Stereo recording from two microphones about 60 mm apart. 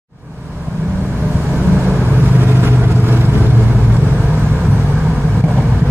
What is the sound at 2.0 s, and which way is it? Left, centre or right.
Vehicle, right.